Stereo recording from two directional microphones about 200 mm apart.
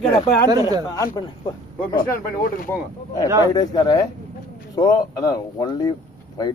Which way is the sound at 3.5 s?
20° left (ahead or behind).